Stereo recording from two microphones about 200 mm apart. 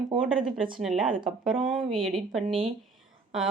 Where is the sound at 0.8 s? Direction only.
5° right (ahead or behind).